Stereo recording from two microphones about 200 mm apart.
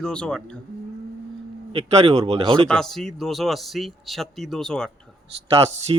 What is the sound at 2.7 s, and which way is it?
Speech, centre (ahead or behind).